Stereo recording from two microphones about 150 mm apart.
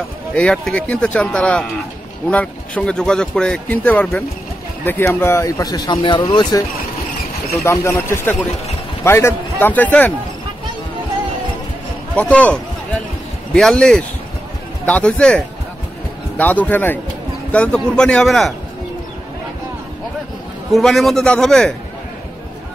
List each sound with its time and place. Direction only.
0.3 s speech: 5° left (ahead or behind); by 6.6 s 25° left (ahead or behind)
7.6 s speech: 20° left (ahead or behind)
12.2 s speech: 10° left (ahead or behind)
13.6 s a man's voice: 5° left (ahead or behind)
20.7 s a man's voice: centre (ahead or behind)